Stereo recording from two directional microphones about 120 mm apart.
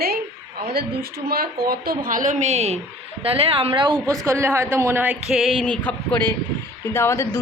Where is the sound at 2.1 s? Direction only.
90° right; by 2.8 s 65° right (ahead or behind).